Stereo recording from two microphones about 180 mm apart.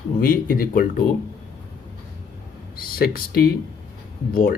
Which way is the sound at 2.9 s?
55° left (ahead or behind).